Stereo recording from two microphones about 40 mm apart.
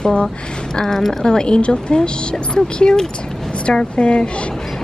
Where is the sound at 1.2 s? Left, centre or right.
Left.